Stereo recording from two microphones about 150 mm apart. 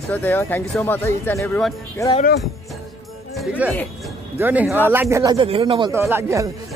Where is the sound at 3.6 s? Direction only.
10° right (ahead or behind).